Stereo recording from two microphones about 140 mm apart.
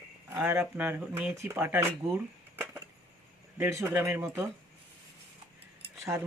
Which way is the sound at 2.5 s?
15° right (ahead or behind).